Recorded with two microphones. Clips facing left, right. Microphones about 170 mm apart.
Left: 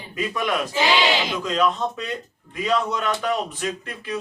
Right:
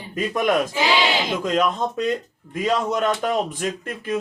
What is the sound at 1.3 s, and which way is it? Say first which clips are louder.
Speech: right 1 dB; 45° right (ahead or behind).